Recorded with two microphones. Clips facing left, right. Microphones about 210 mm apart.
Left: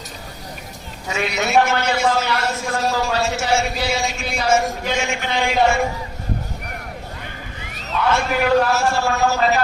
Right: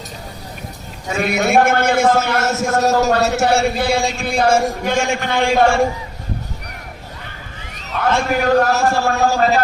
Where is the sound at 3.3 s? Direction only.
60° right (ahead or behind).